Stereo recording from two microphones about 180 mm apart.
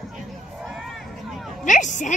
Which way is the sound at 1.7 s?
45° left (ahead or behind).